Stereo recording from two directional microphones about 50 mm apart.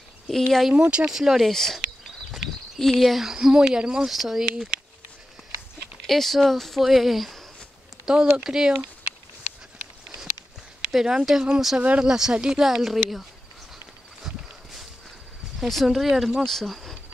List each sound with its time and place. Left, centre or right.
0.3 s speech: centre
0.7 s speech: centre
1.5 s speech: centre
2.8 s speech: centre
3.3 s speech: centre
6.0 s speech: centre
8.0 s speech: centre
10.9 s speech: centre
14.2 s walk: centre
15.6 s speech: centre
16.4 s speech: centre